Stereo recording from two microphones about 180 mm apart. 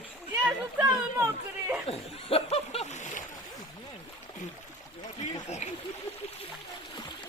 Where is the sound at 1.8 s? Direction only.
35° left (ahead or behind).